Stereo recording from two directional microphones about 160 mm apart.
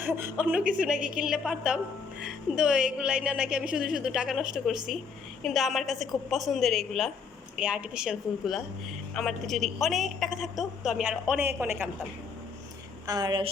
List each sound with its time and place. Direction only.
0.0 s a woman's voice: 10° right (ahead or behind)
13.1 s a woman's voice: 25° right (ahead or behind)